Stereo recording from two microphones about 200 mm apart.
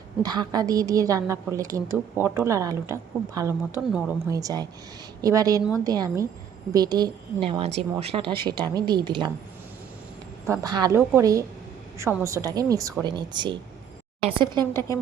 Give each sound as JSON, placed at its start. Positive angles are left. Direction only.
{"t": 0.2, "sound": "a woman's voice", "side_deg": -20}
{"t": 4.3, "sound": "a woman's voice", "side_deg": -15}
{"t": 10.4, "sound": "a woman's voice", "side_deg": -15}
{"t": 14.7, "sound": "speech", "side_deg": 15}